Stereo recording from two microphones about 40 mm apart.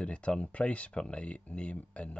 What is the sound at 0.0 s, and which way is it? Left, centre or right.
Speech, left.